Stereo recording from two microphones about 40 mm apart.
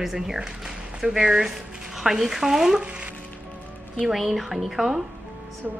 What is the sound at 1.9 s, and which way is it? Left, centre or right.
Speech, centre.